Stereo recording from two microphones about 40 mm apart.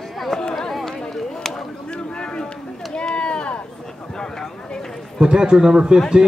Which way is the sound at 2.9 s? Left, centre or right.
Left.